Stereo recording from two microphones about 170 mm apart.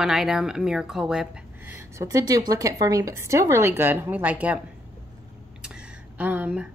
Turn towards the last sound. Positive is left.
turn(degrees=-10)  # may be behind; listen again after turning